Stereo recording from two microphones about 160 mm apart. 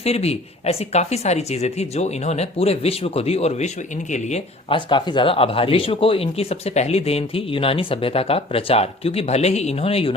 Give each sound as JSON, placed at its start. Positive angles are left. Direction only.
{"t": 0.0, "sound": "speech", "side_deg": 40}
{"t": 4.7, "sound": "speech", "side_deg": 30}